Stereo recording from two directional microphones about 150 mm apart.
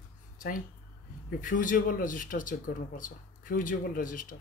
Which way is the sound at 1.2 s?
60° left (ahead or behind).